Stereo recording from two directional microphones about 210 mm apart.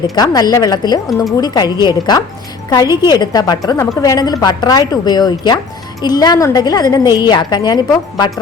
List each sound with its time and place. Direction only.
0.2 s a woman's voice: 20° left (ahead or behind)